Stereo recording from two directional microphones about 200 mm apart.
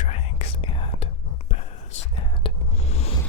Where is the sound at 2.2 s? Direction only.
30° left (ahead or behind).